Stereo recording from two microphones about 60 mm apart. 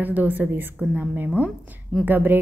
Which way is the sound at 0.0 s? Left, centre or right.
Right.